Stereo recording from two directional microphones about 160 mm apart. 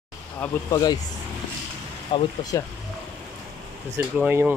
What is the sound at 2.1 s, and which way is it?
Speech, 30° left (ahead or behind).